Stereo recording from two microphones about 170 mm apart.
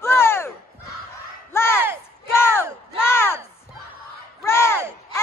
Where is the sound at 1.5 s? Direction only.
15° left (ahead or behind).